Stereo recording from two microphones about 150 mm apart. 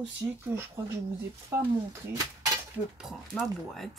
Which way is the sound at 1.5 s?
20° right (ahead or behind).